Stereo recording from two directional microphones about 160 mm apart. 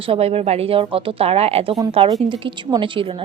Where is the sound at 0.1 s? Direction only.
40° right (ahead or behind).